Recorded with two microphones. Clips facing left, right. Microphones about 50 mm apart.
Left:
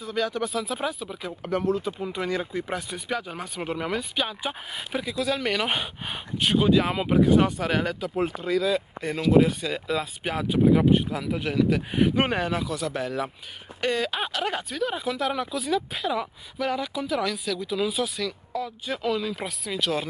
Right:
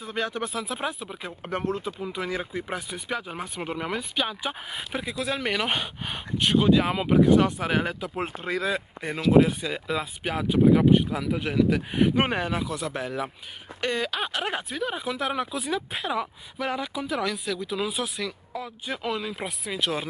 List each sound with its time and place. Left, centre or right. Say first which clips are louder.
0.0 s speech: left 2 dB; right
0.6 s speech: left 2 dB; centre
1.5 s speech: left 4 dB; right
1.9 s speech: left 2 dB; centre
5.7 s speech: even; centre
7.5 s speech: even; centre
8.4 s speech: left 2 dB; right
8.7 s speech: left 3 dB; centre
10.2 s speech: right 1 dB; centre
12.6 s speech: left 2 dB; centre
14.3 s speech: left 1 dB; centre